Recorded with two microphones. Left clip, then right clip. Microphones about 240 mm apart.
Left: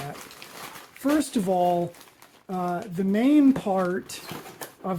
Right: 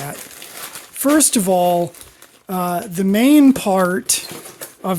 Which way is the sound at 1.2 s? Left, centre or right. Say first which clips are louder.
Right 8 dB; right.